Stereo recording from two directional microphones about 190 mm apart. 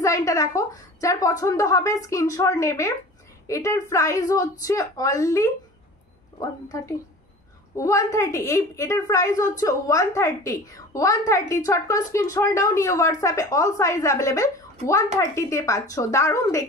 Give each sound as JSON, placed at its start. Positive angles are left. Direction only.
{"t": 0.0, "sound": "a woman's voice", "side_deg": 15}